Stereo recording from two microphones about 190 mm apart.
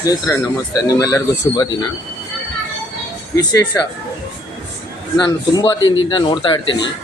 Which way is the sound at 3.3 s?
20° left (ahead or behind).